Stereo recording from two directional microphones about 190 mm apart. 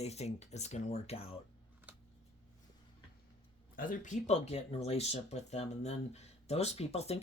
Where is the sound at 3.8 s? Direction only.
45° left (ahead or behind).